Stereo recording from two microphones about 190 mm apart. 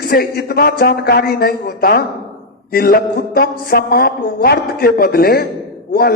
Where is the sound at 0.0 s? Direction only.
50° left (ahead or behind).